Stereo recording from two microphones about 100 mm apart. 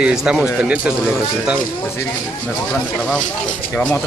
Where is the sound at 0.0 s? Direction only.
5° right (ahead or behind).